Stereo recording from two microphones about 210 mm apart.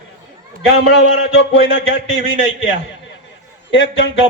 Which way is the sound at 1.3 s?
55° left (ahead or behind).